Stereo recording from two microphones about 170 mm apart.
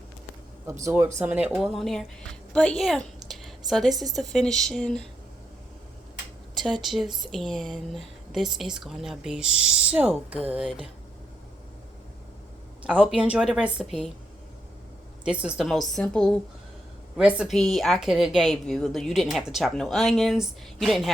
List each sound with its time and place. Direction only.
0.7 s a woman's voice: 20° right (ahead or behind); by 3.1 s 5° left (ahead or behind)
3.2 s a sound: centre (ahead or behind)
3.7 s speech: centre (ahead or behind)
6.6 s speech: centre (ahead or behind)
12.8 s a woman's voice: 5° right (ahead or behind)
15.2 s speech: 5° right (ahead or behind)